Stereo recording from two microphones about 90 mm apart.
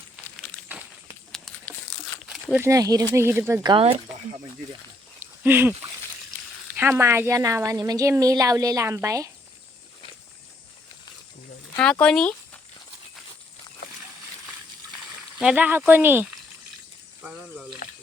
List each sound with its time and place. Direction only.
0.3 s a sound: 15° left (ahead or behind)
2.6 s speech: 35° right (ahead or behind)
3.2 s speech: 25° right (ahead or behind)
3.8 s speech: 90° right
5.2 s a sound: 20° right (ahead or behind)
6.9 s speech: 30° right (ahead or behind)
11.8 s speech: 10° left (ahead or behind)
15.4 s speech: 15° right (ahead or behind)
17.2 s frying: 15° right (ahead or behind)